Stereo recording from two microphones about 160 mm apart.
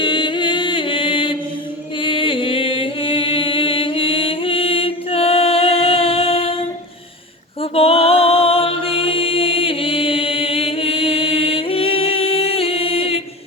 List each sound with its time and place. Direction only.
0.0 s music: 30° left (ahead or behind)
7.6 s mantra: 35° left (ahead or behind)